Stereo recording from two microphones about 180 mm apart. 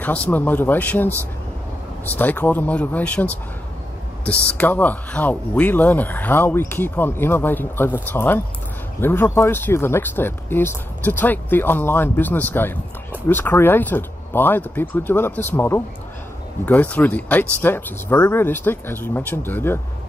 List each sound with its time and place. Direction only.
0.0 s speech: 10° left (ahead or behind)
4.5 s speech: 10° left (ahead or behind)